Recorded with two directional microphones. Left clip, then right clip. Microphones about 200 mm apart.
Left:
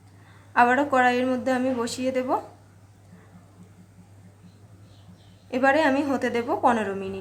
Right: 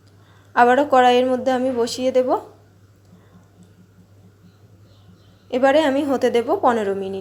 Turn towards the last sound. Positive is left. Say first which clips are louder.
# right 4 dB
turn(degrees=-15)  # may be behind; listen again after turning